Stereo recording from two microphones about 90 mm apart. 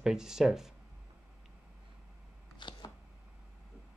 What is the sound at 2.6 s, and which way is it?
Camera, 60° left (ahead or behind).